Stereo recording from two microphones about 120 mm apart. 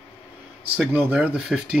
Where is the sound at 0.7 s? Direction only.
10° right (ahead or behind).